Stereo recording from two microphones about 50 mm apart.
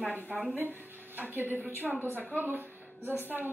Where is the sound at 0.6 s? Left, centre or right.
Right.